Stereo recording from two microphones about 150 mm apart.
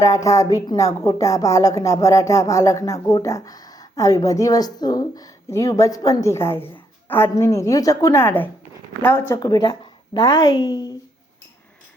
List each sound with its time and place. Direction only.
0.0 s a woman's voice: 20° left (ahead or behind)
9.4 s a woman's voice: 30° left (ahead or behind)